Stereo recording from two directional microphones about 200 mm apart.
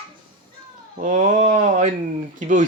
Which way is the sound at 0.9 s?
40° right (ahead or behind).